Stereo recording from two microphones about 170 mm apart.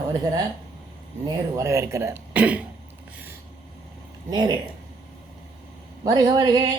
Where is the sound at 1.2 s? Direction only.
20° right (ahead or behind).